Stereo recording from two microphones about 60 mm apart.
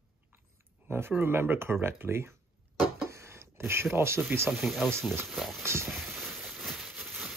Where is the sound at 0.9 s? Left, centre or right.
Right.